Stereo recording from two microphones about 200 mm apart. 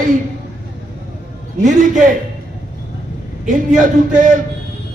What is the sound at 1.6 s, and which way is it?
Speech, 40° right (ahead or behind).